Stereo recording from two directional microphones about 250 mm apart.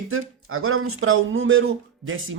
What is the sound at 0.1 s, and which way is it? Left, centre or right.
Speech, right.